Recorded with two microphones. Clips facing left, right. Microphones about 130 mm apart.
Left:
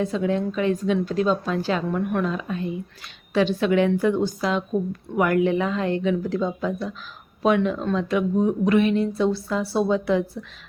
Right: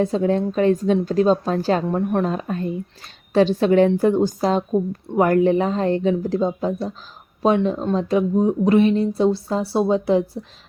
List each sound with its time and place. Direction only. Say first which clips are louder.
0.0 s a woman's voice: right 4 dB; 40° right (ahead or behind)